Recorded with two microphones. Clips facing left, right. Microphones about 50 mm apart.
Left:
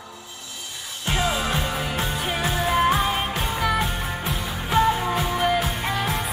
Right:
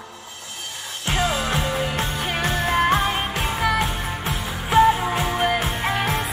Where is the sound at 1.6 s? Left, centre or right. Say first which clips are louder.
Right 2 dB; centre.